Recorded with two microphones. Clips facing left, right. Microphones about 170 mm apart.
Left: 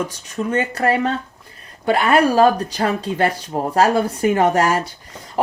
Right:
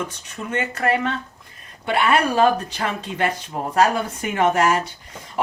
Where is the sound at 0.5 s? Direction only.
35° left (ahead or behind).